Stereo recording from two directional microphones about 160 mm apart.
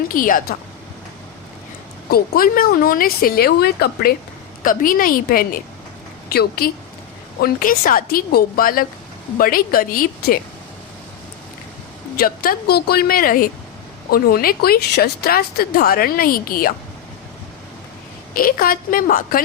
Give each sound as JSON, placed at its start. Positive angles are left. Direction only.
{"t": 0.1, "sound": "a woman's voice", "side_deg": 60}
{"t": 2.0, "sound": "speech", "side_deg": 70}
{"t": 4.6, "sound": "a woman's voice", "side_deg": 60}
{"t": 12.1, "sound": "speech", "side_deg": 65}
{"t": 18.3, "sound": "a woman's voice", "side_deg": 65}